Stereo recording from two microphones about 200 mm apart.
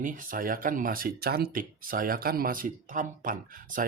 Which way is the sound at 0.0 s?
40° right (ahead or behind).